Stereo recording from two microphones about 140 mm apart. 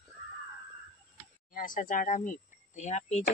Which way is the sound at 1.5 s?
75° left (ahead or behind).